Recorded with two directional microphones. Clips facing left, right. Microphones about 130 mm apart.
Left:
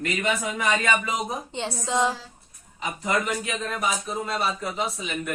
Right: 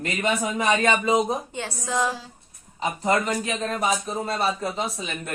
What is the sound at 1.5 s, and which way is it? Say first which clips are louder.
Speech: left 1 dB; 20° left (ahead or behind).